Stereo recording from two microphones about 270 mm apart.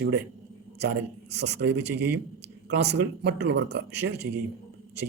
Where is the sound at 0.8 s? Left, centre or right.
Right.